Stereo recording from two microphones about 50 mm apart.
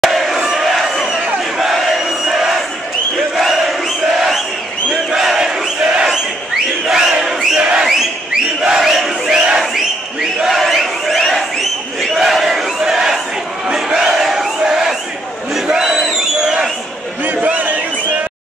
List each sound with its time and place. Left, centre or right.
0.0 s crowd: centre
4.9 s crowd: centre
6.9 s crowd: centre
8.6 s battle cry: centre
10.2 s crowd: centre
12.1 s battle cry: centre
13.7 s a sound: centre
15.5 s battle cry: centre
17.2 s a sound: right